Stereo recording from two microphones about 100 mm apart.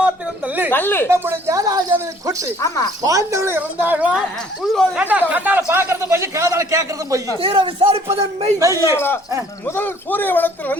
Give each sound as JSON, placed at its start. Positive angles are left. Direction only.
{"t": 0.0, "sound": "a sound", "side_deg": -15}
{"t": 0.7, "sound": "a man's voice", "side_deg": 20}
{"t": 1.0, "sound": "a man's voice", "side_deg": -25}
{"t": 1.5, "sound": "a man's voice", "side_deg": -35}
{"t": 2.6, "sound": "speech", "side_deg": 35}
{"t": 3.0, "sound": "a man's voice", "side_deg": -35}
{"t": 4.6, "sound": "speech", "side_deg": 0}
{"t": 4.9, "sound": "speech", "side_deg": -15}
{"t": 5.6, "sound": "a man's voice", "side_deg": -25}
{"t": 7.4, "sound": "speech", "side_deg": -60}
{"t": 8.5, "sound": "a man's voice", "side_deg": -35}
{"t": 9.6, "sound": "a man's voice", "side_deg": 20}